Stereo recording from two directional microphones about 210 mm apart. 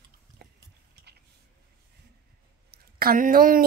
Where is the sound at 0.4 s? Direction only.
50° right (ahead or behind).